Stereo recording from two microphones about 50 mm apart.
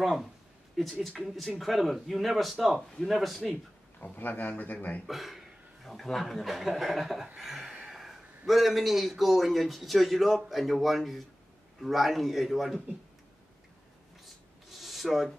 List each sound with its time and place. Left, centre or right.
0.0 s a man's voice: centre
4.0 s a man's voice: left
5.0 s a man's voice: centre
14.2 s rub: centre